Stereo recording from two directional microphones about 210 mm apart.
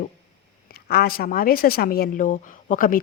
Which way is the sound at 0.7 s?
45° left (ahead or behind).